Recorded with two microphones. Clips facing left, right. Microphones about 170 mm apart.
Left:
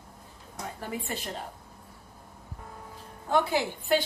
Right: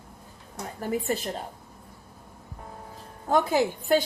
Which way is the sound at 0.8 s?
40° right (ahead or behind).